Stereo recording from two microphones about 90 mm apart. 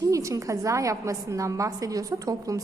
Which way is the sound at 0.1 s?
35° right (ahead or behind).